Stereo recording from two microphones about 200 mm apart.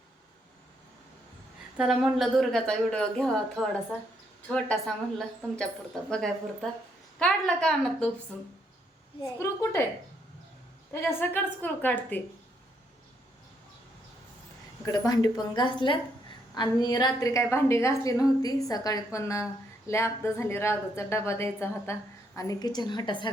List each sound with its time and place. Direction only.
1.8 s a woman's voice: 5° right (ahead or behind); by 9.8 s 15° left (ahead or behind)
10.9 s a woman's voice: 10° left (ahead or behind)
14.8 s a woman's voice: 20° left (ahead or behind)